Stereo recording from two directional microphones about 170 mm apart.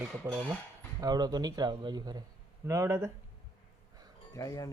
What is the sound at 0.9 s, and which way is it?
Speech, 25° right (ahead or behind).